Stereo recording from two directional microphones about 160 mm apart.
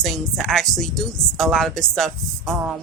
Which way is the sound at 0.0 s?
Centre (ahead or behind).